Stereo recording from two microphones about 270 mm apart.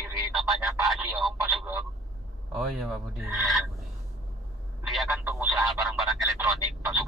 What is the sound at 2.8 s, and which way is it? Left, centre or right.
Speech, centre.